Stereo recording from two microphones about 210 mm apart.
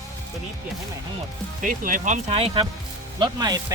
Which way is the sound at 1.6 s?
40° right (ahead or behind).